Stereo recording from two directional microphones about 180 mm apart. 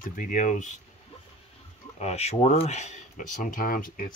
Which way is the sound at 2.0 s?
35° left (ahead or behind).